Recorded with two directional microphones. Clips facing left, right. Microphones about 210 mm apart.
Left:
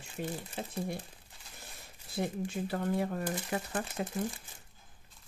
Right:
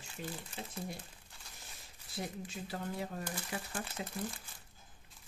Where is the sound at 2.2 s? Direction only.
60° left (ahead or behind).